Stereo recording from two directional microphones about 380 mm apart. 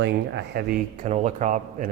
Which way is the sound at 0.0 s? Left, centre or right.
Right.